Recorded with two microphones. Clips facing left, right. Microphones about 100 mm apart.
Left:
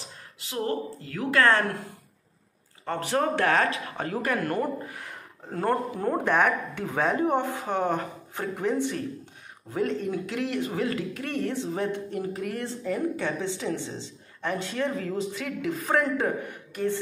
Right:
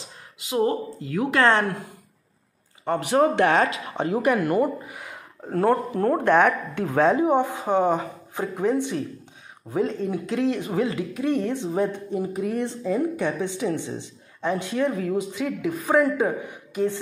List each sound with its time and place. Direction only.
0.4 s speech: 20° right (ahead or behind)
2.8 s speech: 15° right (ahead or behind)
7.1 s a woman's voice: 15° right (ahead or behind)